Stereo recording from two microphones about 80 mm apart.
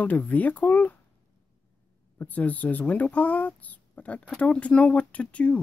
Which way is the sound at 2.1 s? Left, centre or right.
Left.